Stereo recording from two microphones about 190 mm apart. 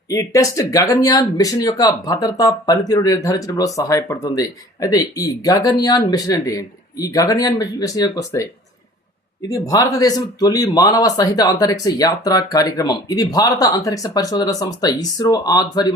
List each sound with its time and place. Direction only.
0.1 s speech: 15° left (ahead or behind)
9.5 s speech: 20° left (ahead or behind)